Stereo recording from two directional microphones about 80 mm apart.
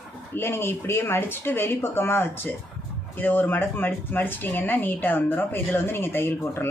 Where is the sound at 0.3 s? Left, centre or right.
Left.